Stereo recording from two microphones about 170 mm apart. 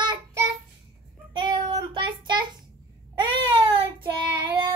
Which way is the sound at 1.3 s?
30° right (ahead or behind).